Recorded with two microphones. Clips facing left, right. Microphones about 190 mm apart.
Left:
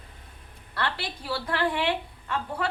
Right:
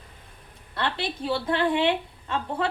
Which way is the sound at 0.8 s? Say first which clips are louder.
Right 3 dB; 20° right (ahead or behind).